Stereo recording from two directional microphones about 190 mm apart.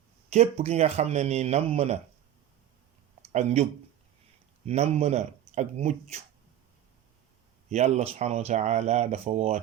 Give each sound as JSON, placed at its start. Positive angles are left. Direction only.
{"t": 0.3, "sound": "speech", "side_deg": -35}
{"t": 3.3, "sound": "speech", "side_deg": -35}
{"t": 7.7, "sound": "speech", "side_deg": -35}